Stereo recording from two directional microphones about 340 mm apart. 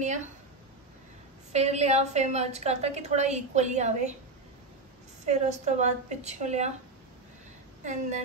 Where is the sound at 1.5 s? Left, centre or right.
Centre.